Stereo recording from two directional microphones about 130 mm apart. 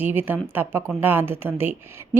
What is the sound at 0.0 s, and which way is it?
Speech, 15° right (ahead or behind).